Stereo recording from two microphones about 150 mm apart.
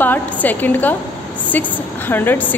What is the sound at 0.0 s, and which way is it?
A woman's voice, 10° left (ahead or behind).